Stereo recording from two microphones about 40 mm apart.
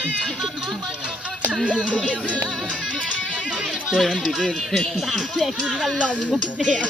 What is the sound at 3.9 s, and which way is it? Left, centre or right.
Speech, centre.